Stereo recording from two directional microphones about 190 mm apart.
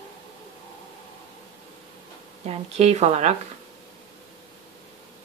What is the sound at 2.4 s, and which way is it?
Speech, 35° right (ahead or behind).